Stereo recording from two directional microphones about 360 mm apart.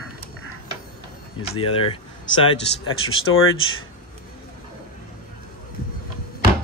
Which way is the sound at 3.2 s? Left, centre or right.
Left.